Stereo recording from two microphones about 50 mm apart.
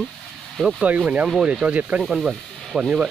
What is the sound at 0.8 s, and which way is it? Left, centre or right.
Speech, right.